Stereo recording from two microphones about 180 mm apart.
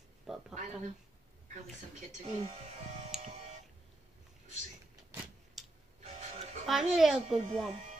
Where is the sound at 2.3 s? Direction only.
35° right (ahead or behind).